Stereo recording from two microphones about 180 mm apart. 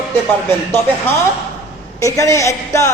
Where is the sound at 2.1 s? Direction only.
15° left (ahead or behind).